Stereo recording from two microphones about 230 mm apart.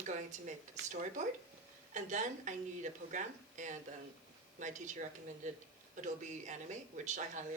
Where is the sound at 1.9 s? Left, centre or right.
Right.